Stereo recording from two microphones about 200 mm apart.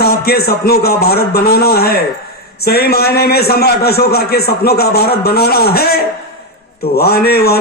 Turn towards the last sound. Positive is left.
turn(degrees=50)  # may be behind; listen again after turning